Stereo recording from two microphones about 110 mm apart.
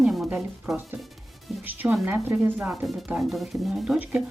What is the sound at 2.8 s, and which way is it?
Speech, centre (ahead or behind).